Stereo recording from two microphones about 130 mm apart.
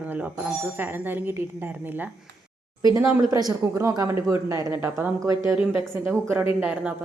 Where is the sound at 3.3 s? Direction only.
25° right (ahead or behind).